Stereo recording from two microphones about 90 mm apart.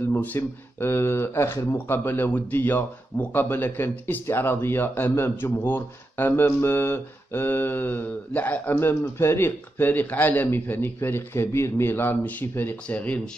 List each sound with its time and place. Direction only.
0.1 s speech: 20° left (ahead or behind)